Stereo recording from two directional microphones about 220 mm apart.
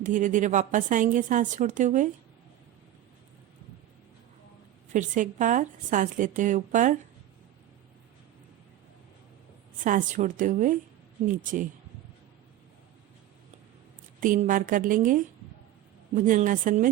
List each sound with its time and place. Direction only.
0.0 s a woman's voice: 35° right (ahead or behind)
4.9 s a woman's voice: 35° right (ahead or behind)
9.8 s a woman's voice: 35° right (ahead or behind)
14.2 s a woman's voice: 35° right (ahead or behind)